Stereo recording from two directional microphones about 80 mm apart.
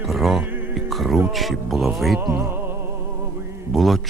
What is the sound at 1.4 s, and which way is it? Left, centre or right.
Speech, centre.